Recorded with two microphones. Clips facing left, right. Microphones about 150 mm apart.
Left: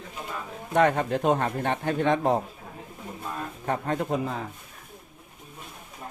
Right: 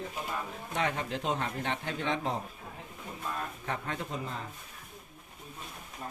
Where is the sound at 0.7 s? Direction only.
55° left (ahead or behind).